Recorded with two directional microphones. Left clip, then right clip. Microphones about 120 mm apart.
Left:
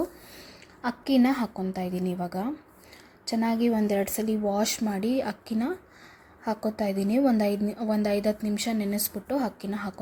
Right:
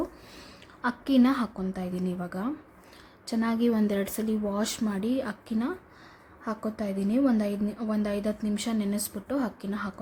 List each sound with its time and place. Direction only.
0.8 s a woman's voice: 15° left (ahead or behind)